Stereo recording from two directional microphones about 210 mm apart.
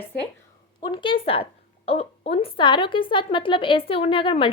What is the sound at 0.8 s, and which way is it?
A woman's voice, 20° left (ahead or behind).